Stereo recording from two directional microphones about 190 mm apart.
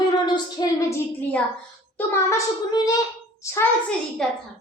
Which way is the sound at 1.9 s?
15° left (ahead or behind).